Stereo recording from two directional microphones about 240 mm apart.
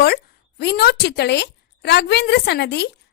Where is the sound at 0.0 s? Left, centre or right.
Left.